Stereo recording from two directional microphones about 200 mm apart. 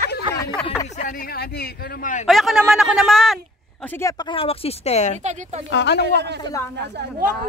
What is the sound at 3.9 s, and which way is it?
Speech, 20° left (ahead or behind).